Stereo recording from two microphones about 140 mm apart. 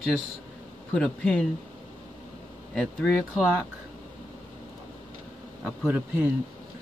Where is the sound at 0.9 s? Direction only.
5° left (ahead or behind).